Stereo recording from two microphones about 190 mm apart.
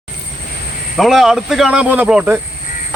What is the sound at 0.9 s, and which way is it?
Speech, centre (ahead or behind).